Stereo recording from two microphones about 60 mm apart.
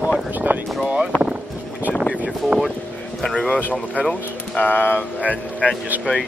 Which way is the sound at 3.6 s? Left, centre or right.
Left.